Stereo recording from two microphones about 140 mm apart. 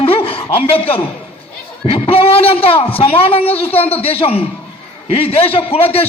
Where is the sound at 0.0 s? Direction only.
40° left (ahead or behind).